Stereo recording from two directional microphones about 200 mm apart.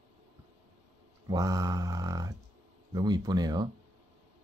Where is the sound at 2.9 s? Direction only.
20° right (ahead or behind).